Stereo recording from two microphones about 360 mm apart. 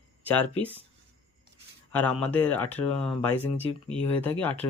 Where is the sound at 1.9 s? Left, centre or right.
Centre.